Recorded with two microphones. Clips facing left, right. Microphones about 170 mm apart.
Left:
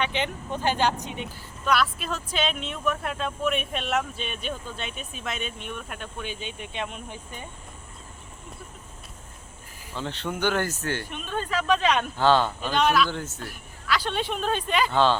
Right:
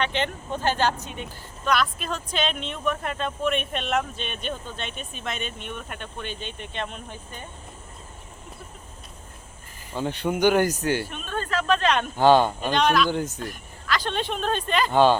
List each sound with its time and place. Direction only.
0.0 s speech: 10° left (ahead or behind)
1.6 s speech: 5° left (ahead or behind)
9.9 s speech: 15° right (ahead or behind)
11.1 s speech: 15° left (ahead or behind)
12.1 s speech: 15° right (ahead or behind)
12.7 s speech: 5° left (ahead or behind)
13.1 s speech: 15° right (ahead or behind)
13.4 s speech: 10° left (ahead or behind)